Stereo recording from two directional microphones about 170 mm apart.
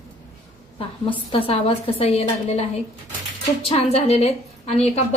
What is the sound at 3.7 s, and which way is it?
Speech, 35° left (ahead or behind).